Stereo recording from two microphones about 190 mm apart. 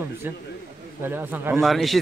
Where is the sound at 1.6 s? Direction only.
Centre (ahead or behind).